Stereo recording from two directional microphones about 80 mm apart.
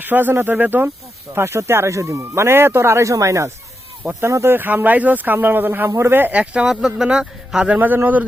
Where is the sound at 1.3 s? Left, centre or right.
Right; by 7.6 s centre.